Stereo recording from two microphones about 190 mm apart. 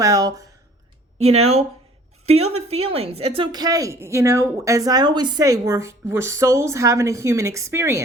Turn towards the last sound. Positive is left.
turn(degrees=-15)  # may be behind; listen again after turning